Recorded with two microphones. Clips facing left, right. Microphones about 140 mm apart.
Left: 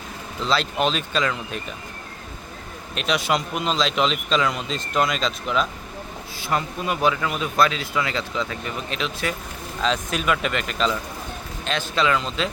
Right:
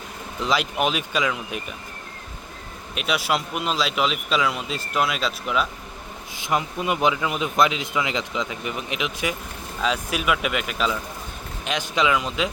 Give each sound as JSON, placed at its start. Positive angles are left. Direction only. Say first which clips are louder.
{"t": 0.3, "sound": "speech", "louder": "even", "side_deg": -15}
{"t": 2.9, "sound": "a man's voice", "louder": "left 1 dB", "side_deg": -5}
{"t": 6.4, "sound": "speech", "louder": "right 1 dB", "side_deg": -15}